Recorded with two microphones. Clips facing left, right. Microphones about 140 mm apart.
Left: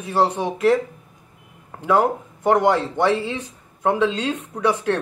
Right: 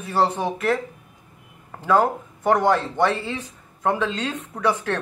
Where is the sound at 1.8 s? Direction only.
15° left (ahead or behind).